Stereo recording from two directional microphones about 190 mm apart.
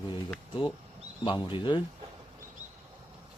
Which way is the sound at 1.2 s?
25° left (ahead or behind).